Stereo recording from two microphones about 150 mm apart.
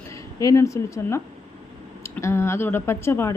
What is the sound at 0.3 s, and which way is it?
A woman's voice, 20° left (ahead or behind).